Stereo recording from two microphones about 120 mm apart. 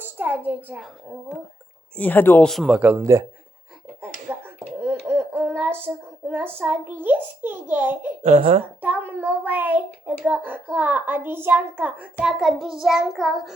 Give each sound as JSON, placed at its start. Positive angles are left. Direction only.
{"t": 0.0, "sound": "a child's voice", "side_deg": -15}
{"t": 2.0, "sound": "speech", "side_deg": 15}
{"t": 2.6, "sound": "a child's voice", "side_deg": -10}
{"t": 3.0, "sound": "a man's voice", "side_deg": -25}
{"t": 4.0, "sound": "finger snapping", "side_deg": -15}
{"t": 5.0, "sound": "a child's voice", "side_deg": -20}
{"t": 8.2, "sound": "speech", "side_deg": -70}
{"t": 8.8, "sound": "a child's voice", "side_deg": -15}
{"t": 12.2, "sound": "child singing", "side_deg": -5}